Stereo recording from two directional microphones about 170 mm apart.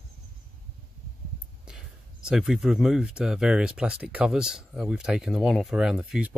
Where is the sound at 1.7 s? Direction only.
5° right (ahead or behind).